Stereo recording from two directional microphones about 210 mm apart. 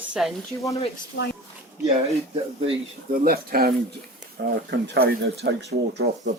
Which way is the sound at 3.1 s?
45° right (ahead or behind).